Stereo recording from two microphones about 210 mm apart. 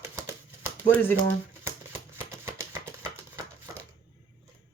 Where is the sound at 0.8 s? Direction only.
10° left (ahead or behind).